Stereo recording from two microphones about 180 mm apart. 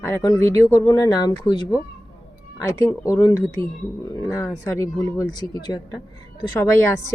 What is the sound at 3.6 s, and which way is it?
Speech, 30° right (ahead or behind).